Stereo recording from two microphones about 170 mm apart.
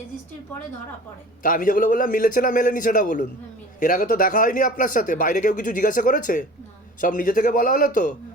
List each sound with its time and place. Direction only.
1.4 s speech: 55° left (ahead or behind)